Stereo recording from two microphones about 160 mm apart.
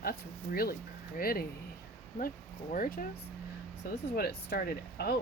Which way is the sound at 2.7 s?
60° left (ahead or behind).